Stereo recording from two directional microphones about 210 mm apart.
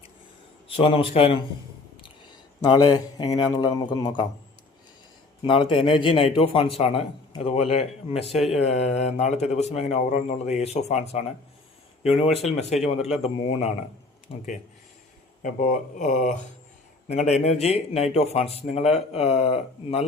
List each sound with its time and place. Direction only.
0.8 s a man's voice: 25° left (ahead or behind)
2.6 s a man's voice: 20° left (ahead or behind)
5.4 s a man's voice: 25° left (ahead or behind)
14.3 s a man's voice: 25° left (ahead or behind)
15.4 s a man's voice: 40° left (ahead or behind)